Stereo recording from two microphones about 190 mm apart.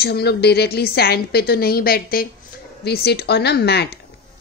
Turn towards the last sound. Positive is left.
turn(degrees=60)  # may be behind; listen again after turning